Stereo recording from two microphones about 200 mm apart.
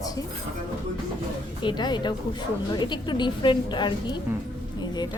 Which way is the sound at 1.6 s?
20° left (ahead or behind).